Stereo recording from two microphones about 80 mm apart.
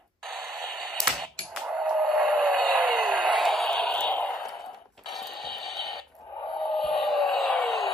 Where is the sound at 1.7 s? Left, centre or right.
Centre.